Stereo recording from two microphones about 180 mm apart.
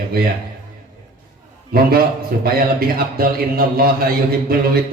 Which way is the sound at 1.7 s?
55° right (ahead or behind).